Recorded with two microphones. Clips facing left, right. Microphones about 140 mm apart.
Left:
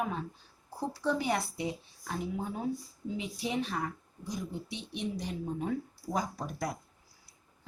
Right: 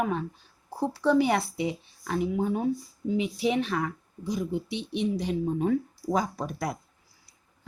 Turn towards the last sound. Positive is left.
turn(degrees=-70)  # may be behind; listen again after turning